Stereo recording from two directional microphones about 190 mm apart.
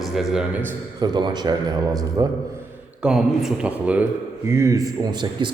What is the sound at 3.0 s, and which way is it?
A man's voice, 5° right (ahead or behind).